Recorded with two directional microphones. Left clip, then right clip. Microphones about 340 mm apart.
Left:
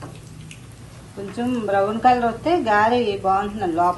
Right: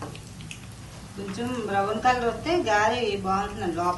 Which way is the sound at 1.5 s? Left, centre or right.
Centre.